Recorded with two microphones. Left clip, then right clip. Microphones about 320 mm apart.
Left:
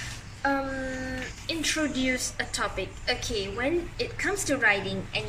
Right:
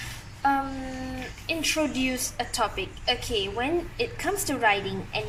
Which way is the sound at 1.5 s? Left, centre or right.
Centre.